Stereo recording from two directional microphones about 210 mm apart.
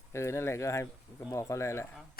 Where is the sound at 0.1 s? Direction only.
15° left (ahead or behind).